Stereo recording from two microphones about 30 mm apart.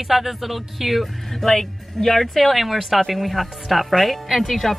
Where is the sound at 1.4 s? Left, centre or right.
Centre.